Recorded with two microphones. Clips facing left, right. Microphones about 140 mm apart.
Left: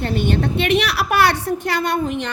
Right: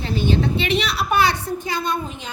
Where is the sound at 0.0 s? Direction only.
60° left (ahead or behind).